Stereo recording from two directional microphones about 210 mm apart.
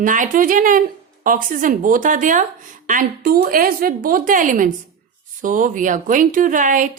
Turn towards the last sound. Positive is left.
turn(degrees=-40)  # may be behind; listen again after turning